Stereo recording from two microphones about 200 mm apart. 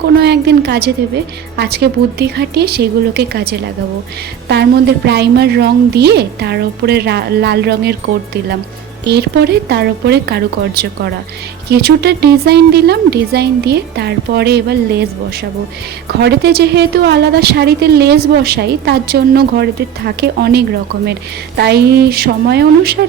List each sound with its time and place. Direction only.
0.2 s a woman's voice: 55° right (ahead or behind)
16.2 s a woman's voice: 50° right (ahead or behind)